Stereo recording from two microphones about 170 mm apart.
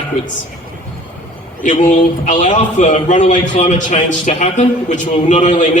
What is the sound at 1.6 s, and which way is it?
A man's voice, 45° left (ahead or behind).